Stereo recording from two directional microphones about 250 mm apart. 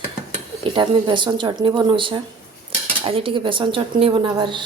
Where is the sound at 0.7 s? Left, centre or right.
Centre.